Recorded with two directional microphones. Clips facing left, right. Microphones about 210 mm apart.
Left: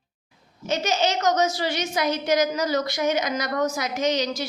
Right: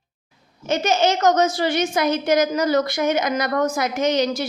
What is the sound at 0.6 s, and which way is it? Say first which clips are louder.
A woman's voice: right 4 dB; 55° right (ahead or behind).